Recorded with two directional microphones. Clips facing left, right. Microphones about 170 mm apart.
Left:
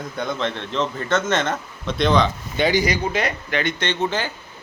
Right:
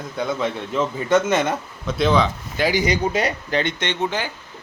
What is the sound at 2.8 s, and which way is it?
Speech, 35° right (ahead or behind).